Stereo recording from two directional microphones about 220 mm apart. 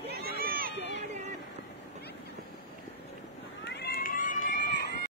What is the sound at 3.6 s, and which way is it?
Run, 50° left (ahead or behind).